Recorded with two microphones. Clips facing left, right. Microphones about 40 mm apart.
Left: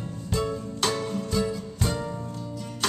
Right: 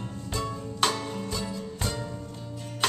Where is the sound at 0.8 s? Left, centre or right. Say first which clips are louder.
Right 1 dB; centre.